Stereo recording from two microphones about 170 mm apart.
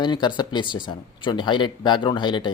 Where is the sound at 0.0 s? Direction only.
25° left (ahead or behind).